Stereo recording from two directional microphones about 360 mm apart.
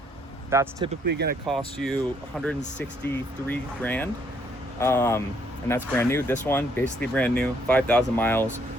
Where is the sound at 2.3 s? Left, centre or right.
Centre.